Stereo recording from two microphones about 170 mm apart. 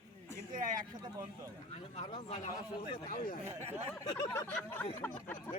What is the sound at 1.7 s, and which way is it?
Speech, 40° left (ahead or behind).